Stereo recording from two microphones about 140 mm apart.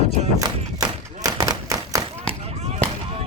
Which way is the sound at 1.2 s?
25° right (ahead or behind).